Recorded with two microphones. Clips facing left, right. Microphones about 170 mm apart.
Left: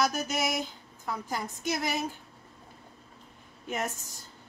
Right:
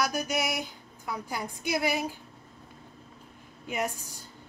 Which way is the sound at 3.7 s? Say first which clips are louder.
Right 2 dB; 10° right (ahead or behind).